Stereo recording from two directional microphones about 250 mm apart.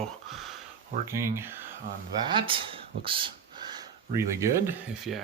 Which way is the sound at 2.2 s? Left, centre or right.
Centre.